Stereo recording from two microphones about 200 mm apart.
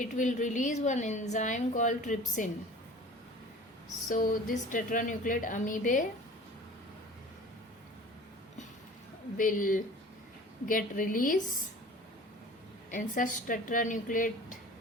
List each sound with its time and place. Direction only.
0.0 s a woman's voice: 40° left (ahead or behind)
4.1 s a woman's voice: 45° left (ahead or behind)
9.4 s a woman's voice: 40° left (ahead or behind)
12.9 s a woman's voice: 40° left (ahead or behind)